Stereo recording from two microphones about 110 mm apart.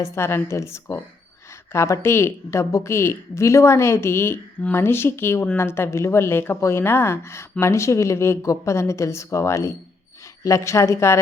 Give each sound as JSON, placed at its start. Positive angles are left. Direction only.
{"t": 0.0, "sound": "a woman's voice", "side_deg": 25}